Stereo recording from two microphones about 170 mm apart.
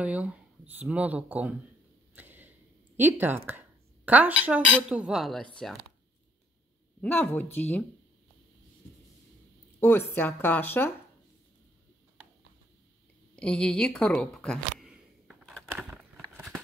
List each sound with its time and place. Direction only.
0.0 s speech: 10° right (ahead or behind)
2.1 s a sound: 10° right (ahead or behind)
3.0 s speech: 10° right (ahead or behind)
7.0 s speech: 10° left (ahead or behind)
9.8 s speech: 15° left (ahead or behind)
13.4 s speech: 5° left (ahead or behind)
14.8 s a sound: centre (ahead or behind)